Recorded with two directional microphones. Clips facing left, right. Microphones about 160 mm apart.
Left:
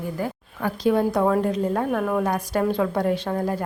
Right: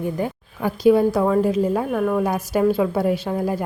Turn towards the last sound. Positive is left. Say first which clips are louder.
# right 2 dB
turn(degrees=-10)  # may be behind; listen again after turning